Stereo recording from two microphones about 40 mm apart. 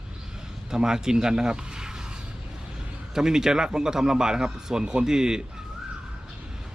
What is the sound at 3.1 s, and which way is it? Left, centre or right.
Speech, centre.